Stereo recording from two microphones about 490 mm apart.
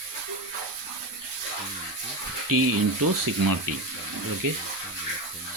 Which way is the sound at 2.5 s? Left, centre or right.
Right.